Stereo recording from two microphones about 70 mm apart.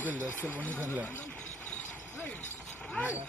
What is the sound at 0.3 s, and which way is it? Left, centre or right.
Speech, left.